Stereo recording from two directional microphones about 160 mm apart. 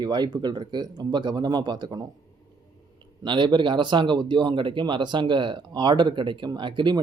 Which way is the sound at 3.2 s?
30° right (ahead or behind).